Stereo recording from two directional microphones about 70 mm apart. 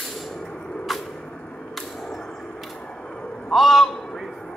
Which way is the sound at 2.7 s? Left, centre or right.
Centre.